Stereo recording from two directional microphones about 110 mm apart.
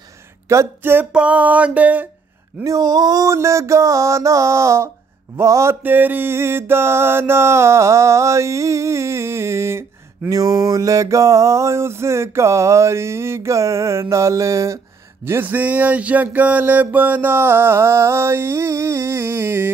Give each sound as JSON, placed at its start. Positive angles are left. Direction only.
{"t": 0.5, "sound": "music", "side_deg": -25}
{"t": 1.1, "sound": "a sound", "side_deg": -10}
{"t": 2.6, "sound": "music", "side_deg": -35}
{"t": 5.8, "sound": "music", "side_deg": -15}